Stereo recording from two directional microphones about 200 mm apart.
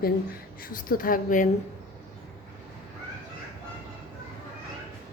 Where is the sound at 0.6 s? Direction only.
45° left (ahead or behind).